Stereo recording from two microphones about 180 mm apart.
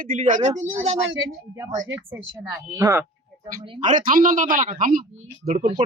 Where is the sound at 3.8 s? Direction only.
50° right (ahead or behind).